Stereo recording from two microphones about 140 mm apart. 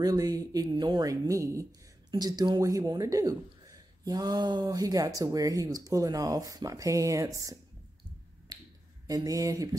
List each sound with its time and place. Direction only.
0.0 s speech: 25° right (ahead or behind)
8.5 s finger snapping: 30° right (ahead or behind)
9.0 s speech: 25° right (ahead or behind)